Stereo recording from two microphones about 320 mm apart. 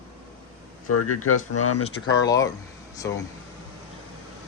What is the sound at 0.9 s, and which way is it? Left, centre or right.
Speech, left.